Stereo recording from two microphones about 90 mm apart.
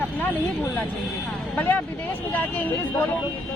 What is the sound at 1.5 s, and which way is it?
Speech, 20° left (ahead or behind).